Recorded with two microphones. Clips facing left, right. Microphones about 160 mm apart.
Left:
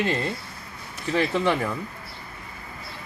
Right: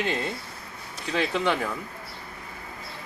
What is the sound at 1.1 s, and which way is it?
Speech, 5° left (ahead or behind).